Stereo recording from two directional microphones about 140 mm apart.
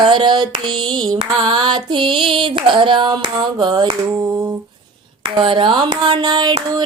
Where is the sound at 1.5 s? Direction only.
35° right (ahead or behind).